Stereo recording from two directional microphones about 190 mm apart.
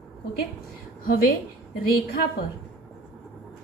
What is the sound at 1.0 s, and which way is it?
Speech, 50° left (ahead or behind).